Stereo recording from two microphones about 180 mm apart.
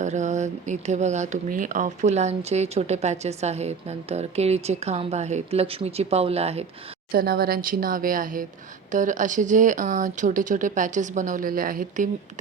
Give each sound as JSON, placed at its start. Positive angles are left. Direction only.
{"t": 0.0, "sound": "speech", "side_deg": -40}
{"t": 7.1, "sound": "speech", "side_deg": -55}